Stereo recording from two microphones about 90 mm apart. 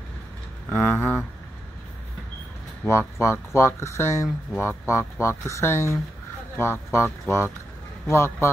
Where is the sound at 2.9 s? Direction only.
30° left (ahead or behind).